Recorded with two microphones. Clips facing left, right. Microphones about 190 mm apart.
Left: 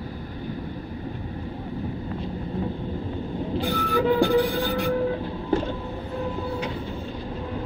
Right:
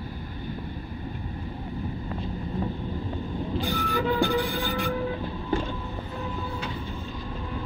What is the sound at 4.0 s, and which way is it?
Music, 30° left (ahead or behind).